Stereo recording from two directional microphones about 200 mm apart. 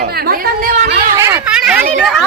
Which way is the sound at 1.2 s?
10° right (ahead or behind).